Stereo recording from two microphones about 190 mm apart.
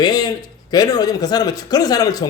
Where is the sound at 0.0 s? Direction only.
20° left (ahead or behind).